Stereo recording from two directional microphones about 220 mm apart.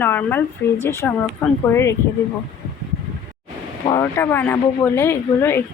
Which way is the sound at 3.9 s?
10° left (ahead or behind).